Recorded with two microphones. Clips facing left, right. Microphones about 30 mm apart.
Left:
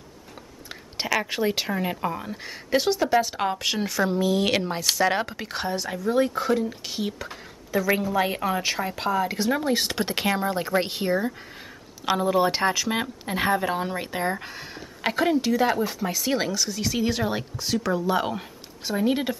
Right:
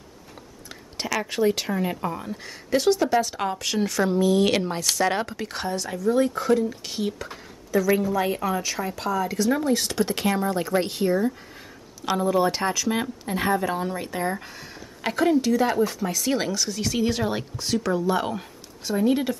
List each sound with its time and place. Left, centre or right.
0.9 s speech: centre
7.7 s speech: left